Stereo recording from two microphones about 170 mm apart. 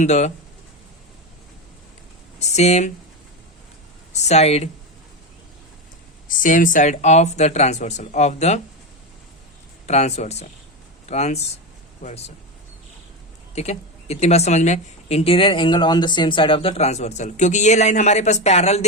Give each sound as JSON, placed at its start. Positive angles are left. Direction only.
{"t": 0.0, "sound": "speech", "side_deg": 45}
{"t": 2.4, "sound": "speech", "side_deg": 40}
{"t": 4.1, "sound": "speech", "side_deg": 40}
{"t": 6.2, "sound": "speech", "side_deg": 50}
{"t": 9.8, "sound": "speech", "side_deg": 40}
{"t": 13.6, "sound": "speech", "side_deg": 40}